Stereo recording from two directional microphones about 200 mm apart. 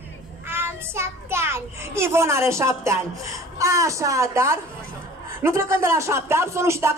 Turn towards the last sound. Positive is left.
turn(degrees=-15)  # may be behind; listen again after turning